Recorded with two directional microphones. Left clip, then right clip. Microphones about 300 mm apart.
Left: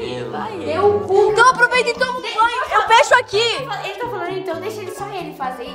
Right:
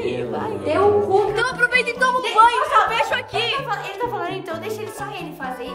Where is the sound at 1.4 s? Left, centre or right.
Centre.